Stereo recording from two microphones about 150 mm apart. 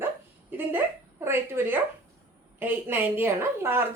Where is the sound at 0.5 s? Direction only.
15° right (ahead or behind).